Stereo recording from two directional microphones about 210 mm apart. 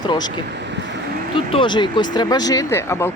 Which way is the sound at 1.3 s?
25° left (ahead or behind).